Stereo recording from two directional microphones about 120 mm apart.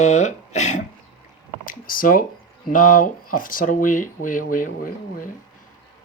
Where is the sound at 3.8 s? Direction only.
90° left.